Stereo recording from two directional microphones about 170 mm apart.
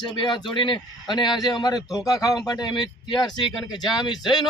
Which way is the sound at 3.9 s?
25° left (ahead or behind).